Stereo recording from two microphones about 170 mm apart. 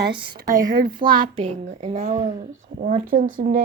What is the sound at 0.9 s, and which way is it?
Child singing, 25° right (ahead or behind).